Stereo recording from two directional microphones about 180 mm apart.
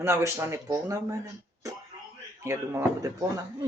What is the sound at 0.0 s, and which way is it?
Speech, 15° right (ahead or behind).